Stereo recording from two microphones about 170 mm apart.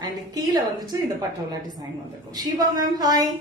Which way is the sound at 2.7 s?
20° right (ahead or behind).